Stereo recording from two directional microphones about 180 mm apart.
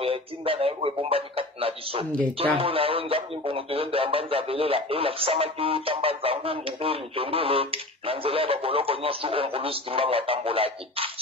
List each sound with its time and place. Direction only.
0.0 s speech: 30° right (ahead or behind)